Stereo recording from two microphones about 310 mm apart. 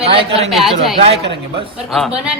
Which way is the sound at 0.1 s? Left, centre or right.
Centre.